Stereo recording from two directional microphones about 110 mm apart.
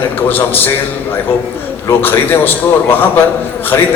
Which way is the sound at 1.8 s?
20° left (ahead or behind).